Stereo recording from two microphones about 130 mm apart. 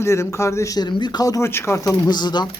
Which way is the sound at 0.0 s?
20° left (ahead or behind).